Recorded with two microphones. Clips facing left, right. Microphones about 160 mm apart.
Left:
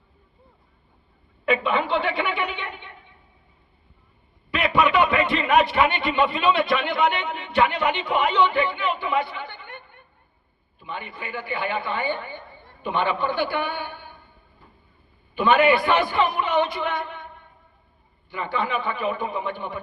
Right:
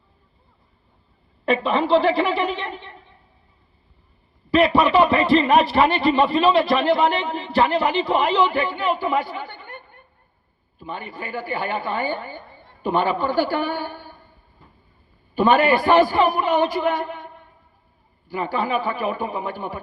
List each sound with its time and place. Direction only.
1.5 s a man's voice: 35° right (ahead or behind)
4.5 s a man's voice: 30° right (ahead or behind)
15.4 s a man's voice: 40° right (ahead or behind)
18.3 s a man's voice: 40° right (ahead or behind)